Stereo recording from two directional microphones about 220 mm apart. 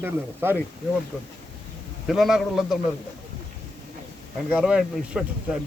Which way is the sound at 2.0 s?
Centre (ahead or behind).